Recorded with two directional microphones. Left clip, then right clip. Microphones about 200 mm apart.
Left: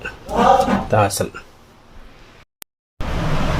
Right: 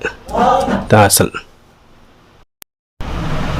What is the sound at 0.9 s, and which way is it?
Speech, 55° right (ahead or behind).